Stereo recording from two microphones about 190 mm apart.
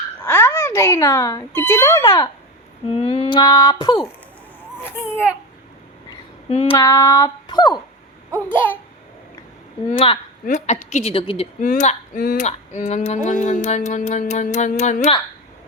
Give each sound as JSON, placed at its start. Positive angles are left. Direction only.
{"t": 0.3, "sound": "a child's voice", "side_deg": 10}
{"t": 2.9, "sound": "a sound", "side_deg": 30}
{"t": 4.8, "sound": "a child's voice", "side_deg": 10}
{"t": 6.5, "sound": "speech", "side_deg": 35}
{"t": 6.7, "sound": "a sound", "side_deg": 15}
{"t": 8.5, "sound": "a child's voice", "side_deg": 10}
{"t": 10.4, "sound": "speech", "side_deg": 40}
{"t": 11.6, "sound": "speech", "side_deg": 40}